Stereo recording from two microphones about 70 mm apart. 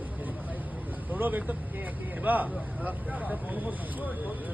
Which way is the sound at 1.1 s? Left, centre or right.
Right.